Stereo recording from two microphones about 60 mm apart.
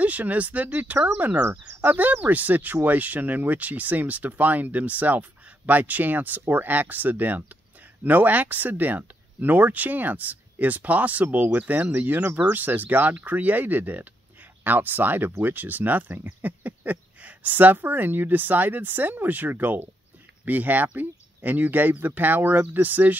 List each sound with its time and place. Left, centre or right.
0.0 s speech: right